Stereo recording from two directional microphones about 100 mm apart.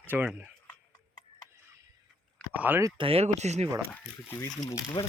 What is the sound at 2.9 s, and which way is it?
Speech, 75° right (ahead or behind).